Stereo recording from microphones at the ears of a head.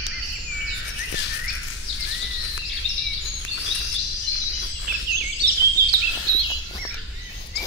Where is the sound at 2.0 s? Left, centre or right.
Left.